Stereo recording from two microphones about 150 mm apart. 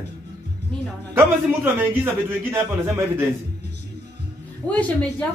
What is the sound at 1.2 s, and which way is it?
A man's voice, 15° right (ahead or behind).